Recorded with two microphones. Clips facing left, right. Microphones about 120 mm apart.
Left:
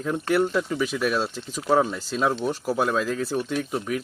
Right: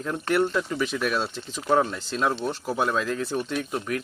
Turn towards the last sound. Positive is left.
turn(degrees=5)  # may be behind; listen again after turning